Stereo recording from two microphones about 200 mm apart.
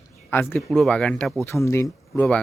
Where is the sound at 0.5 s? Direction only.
Centre (ahead or behind).